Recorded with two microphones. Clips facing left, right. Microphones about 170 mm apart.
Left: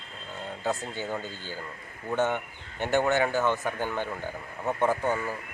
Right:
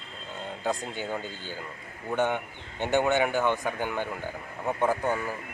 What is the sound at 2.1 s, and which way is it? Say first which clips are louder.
Speech: even; 15° right (ahead or behind).